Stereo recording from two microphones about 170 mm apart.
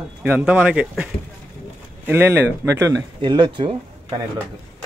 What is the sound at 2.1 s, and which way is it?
Speech, 10° right (ahead or behind).